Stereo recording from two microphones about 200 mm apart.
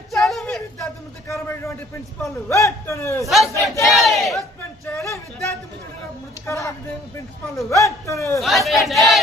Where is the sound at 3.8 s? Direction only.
Centre (ahead or behind).